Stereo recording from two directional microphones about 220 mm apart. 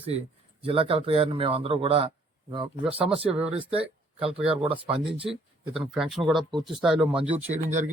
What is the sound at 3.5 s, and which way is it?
Speech, 25° right (ahead or behind).